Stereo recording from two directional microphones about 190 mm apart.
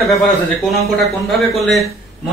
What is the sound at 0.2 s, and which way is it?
Speech, centre (ahead or behind).